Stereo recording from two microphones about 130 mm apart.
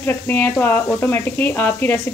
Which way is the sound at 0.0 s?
15° left (ahead or behind).